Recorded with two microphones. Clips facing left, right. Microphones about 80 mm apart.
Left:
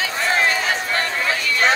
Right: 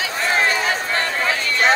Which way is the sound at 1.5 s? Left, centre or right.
Right.